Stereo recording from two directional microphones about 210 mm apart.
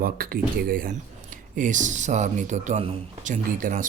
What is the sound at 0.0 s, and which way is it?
Speech, 45° right (ahead or behind).